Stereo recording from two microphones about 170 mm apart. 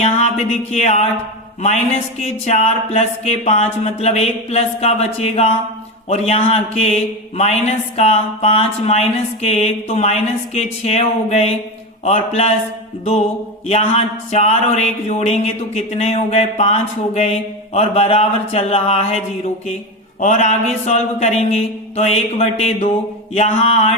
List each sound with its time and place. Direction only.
0.0 s a sound: 40° left (ahead or behind)
1.6 s mantra: 40° left (ahead or behind)
13.7 s mantra: 40° left (ahead or behind)